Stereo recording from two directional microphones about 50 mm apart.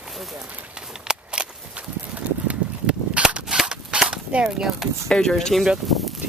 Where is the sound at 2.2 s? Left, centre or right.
Right.